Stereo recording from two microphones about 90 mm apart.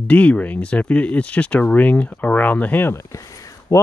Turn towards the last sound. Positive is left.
turn(degrees=35)  # may be behind; listen again after turning